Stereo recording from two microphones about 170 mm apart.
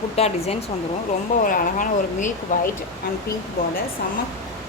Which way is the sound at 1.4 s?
50° left (ahead or behind).